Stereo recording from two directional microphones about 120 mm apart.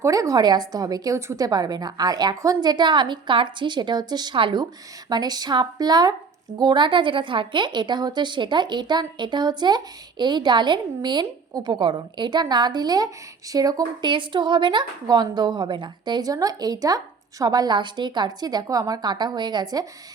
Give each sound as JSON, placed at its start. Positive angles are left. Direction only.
{"t": 0.0, "sound": "a woman's voice", "side_deg": -30}